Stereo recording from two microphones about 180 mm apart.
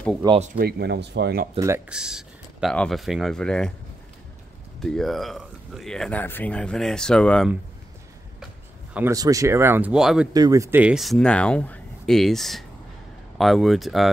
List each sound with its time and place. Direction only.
0.2 s speech: 20° right (ahead or behind)
0.6 s speech: 60° right (ahead or behind)
1.9 s speech: 5° right (ahead or behind)
4.7 s speech: centre (ahead or behind)
9.1 s speech: 20° right (ahead or behind); by 10.2 s 5° right (ahead or behind)
10.3 s speech: 20° right (ahead or behind); by 14.0 s centre (ahead or behind)